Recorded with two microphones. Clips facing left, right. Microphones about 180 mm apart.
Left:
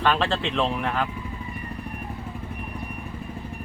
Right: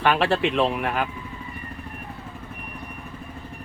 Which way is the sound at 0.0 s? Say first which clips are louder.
Right 3 dB; 15° right (ahead or behind).